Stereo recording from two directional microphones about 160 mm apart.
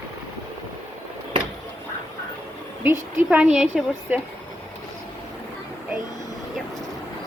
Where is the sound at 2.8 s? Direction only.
10° right (ahead or behind).